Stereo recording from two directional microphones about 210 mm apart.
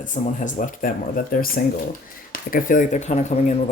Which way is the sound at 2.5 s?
40° left (ahead or behind).